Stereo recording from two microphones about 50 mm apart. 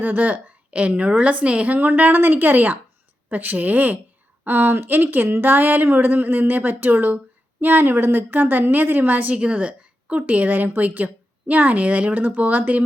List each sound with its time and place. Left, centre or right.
0.0 s a woman's voice: right
9.3 s a woman's voice: right